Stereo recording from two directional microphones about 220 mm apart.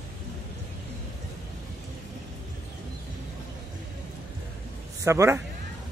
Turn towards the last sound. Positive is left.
turn(degrees=-15)  # may be behind; listen again after turning